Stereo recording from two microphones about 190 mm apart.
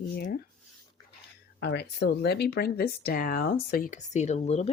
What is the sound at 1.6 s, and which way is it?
Speech, 60° left (ahead or behind).